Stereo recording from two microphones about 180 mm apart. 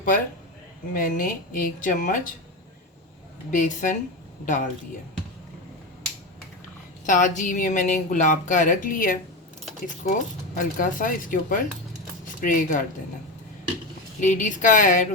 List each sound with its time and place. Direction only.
0.9 s speech: 50° left (ahead or behind)
3.5 s speech: 45° left (ahead or behind)
7.0 s speech: 45° left (ahead or behind)
14.2 s speech: 45° left (ahead or behind)